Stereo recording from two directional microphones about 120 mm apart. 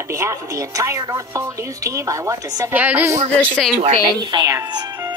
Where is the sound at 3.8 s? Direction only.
55° right (ahead or behind).